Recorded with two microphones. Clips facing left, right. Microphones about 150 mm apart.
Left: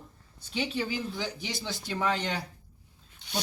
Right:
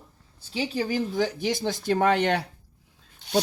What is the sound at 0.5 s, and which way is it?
Speech, 35° right (ahead or behind).